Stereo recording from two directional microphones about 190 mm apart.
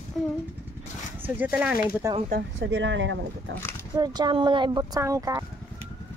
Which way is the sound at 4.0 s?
20° right (ahead or behind).